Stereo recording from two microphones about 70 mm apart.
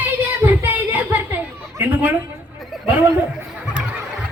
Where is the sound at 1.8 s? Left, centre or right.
Right.